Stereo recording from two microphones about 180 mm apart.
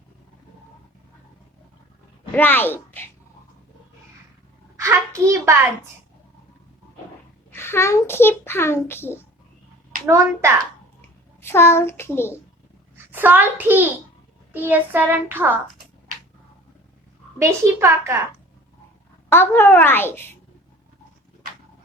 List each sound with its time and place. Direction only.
2.3 s a child's voice: 10° left (ahead or behind)
4.8 s child singing: 15° right (ahead or behind)
7.5 s a child's voice: 15° left (ahead or behind)
11.3 s a child's voice: 15° left (ahead or behind)
13.1 s child singing: 10° right (ahead or behind)
17.4 s child singing: 15° right (ahead or behind)
19.3 s a child's voice: 10° left (ahead or behind)